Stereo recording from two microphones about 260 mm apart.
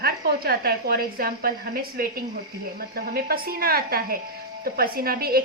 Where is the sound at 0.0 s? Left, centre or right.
Right.